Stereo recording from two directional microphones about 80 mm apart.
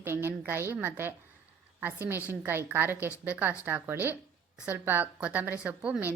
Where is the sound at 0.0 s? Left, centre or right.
Right.